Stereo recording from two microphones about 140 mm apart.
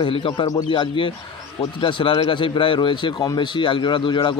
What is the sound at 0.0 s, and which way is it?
A man's voice, 35° left (ahead or behind).